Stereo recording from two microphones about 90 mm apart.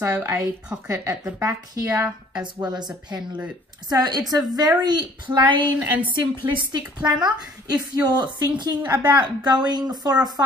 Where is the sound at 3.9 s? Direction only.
50° right (ahead or behind).